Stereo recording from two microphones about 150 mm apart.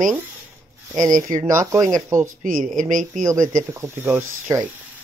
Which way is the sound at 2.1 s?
60° right (ahead or behind).